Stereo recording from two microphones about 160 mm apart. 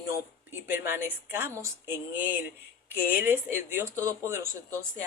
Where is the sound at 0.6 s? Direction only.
15° right (ahead or behind).